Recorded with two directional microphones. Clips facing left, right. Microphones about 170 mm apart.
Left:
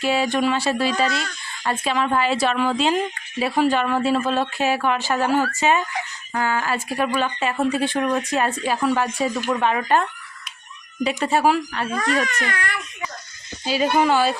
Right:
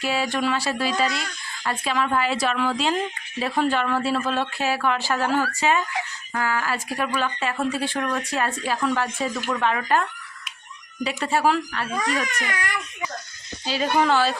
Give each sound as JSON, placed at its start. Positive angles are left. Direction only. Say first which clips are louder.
{"t": 0.0, "sound": "a woman's voice", "louder": "left 4 dB", "side_deg": 20}
{"t": 12.3, "sound": "speech", "louder": "left 2 dB", "side_deg": -10}
{"t": 13.7, "sound": "speech", "louder": "left 2 dB", "side_deg": 10}